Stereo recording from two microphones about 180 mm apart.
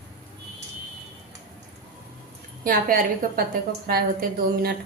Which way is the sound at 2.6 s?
50° right (ahead or behind).